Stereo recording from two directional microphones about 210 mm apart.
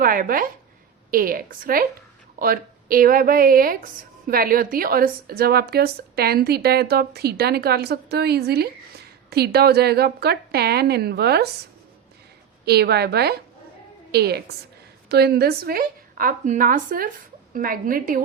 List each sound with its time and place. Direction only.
0.0 s a woman's voice: 45° right (ahead or behind)
12.6 s a woman's voice: 50° right (ahead or behind)